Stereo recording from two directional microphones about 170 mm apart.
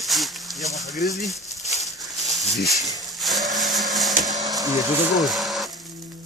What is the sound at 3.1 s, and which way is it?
Blender, centre (ahead or behind).